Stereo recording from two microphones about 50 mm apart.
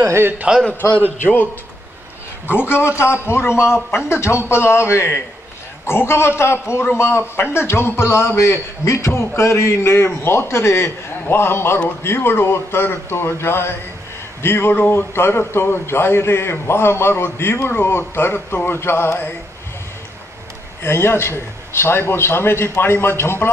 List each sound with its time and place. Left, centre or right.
0.1 s a man's voice: right
0.9 s a man's voice: left
8.4 s a man's voice: left
9.3 s a man's voice: left
20.8 s a man's voice: left